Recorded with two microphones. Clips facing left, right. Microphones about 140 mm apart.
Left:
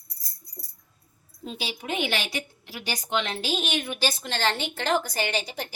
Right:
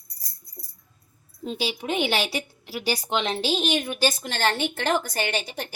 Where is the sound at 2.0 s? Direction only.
35° right (ahead or behind).